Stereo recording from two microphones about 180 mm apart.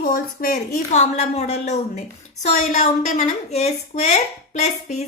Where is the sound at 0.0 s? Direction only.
50° left (ahead or behind).